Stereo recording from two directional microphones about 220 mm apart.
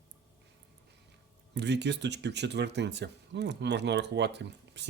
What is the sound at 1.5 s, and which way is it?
Speech, 50° right (ahead or behind).